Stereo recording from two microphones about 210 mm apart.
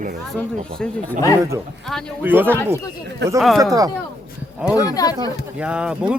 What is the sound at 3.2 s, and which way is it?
Speech, 55° right (ahead or behind).